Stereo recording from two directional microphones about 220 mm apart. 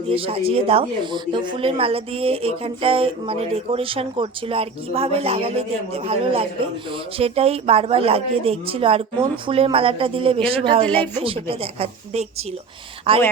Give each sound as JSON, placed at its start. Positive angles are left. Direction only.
{"t": 0.1, "sound": "speech", "side_deg": -25}